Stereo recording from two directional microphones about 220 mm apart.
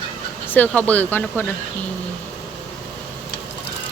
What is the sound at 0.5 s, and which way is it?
Speech, 5° left (ahead or behind).